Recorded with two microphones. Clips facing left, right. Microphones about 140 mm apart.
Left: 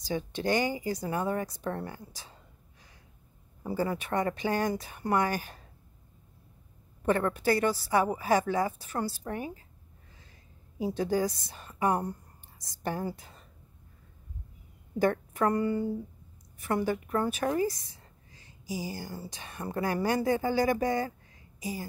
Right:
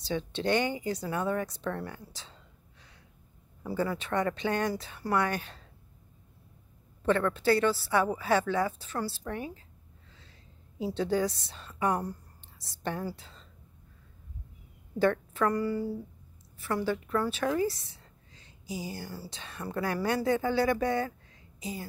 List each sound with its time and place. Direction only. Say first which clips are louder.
0.0 s a woman's voice: even; 10° left (ahead or behind)
3.6 s a woman's voice: left 1 dB; 15° left (ahead or behind)
7.0 s a woman's voice: even; 15° left (ahead or behind)
11.0 s a woman's voice: right 1 dB; 10° left (ahead or behind)
11.9 s a sound: left 1 dB; 20° left (ahead or behind)
13.1 s speech: left 1 dB; 15° left (ahead or behind)
15.0 s a woman's voice: even; 15° left (ahead or behind)